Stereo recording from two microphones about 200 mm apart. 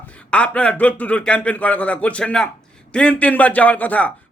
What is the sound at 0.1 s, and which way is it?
A man's voice, 5° left (ahead or behind).